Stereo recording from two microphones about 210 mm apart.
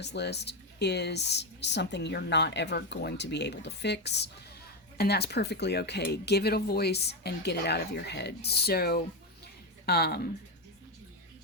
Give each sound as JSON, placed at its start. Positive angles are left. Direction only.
{"t": 0.0, "sound": "a woman's voice", "side_deg": 55}